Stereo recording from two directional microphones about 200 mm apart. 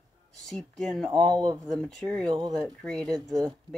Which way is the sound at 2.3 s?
20° right (ahead or behind).